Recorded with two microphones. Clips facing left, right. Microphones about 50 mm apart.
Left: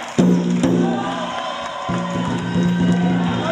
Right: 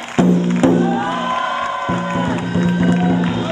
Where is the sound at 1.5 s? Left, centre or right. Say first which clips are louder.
Right 5 dB; right.